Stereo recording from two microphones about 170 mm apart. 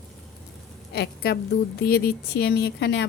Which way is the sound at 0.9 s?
70° left (ahead or behind).